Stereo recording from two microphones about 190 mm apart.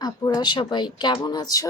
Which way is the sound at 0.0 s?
20° left (ahead or behind).